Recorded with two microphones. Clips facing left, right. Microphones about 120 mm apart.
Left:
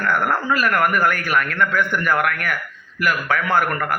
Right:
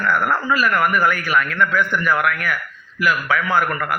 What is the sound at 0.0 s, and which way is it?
Speech, 50° left (ahead or behind).